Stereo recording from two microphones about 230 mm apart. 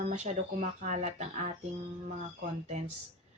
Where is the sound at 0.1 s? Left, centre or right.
Right.